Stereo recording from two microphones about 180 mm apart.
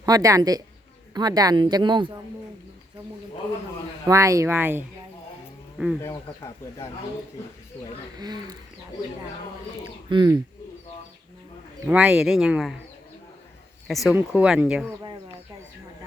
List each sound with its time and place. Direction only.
0.0 s speech: 20° right (ahead or behind)
4.0 s speech: 15° right (ahead or behind)
6.0 s speech: 20° left (ahead or behind)
8.2 s speech: 20° right (ahead or behind)
10.1 s speech: 25° right (ahead or behind)
11.9 s speech: 5° right (ahead or behind)
13.8 s speech: centre (ahead or behind)
14.1 s speech: 10° right (ahead or behind)